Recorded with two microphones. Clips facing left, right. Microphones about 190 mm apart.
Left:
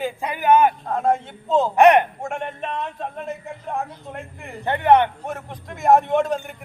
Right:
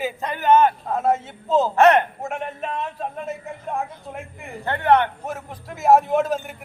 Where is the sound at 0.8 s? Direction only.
5° right (ahead or behind).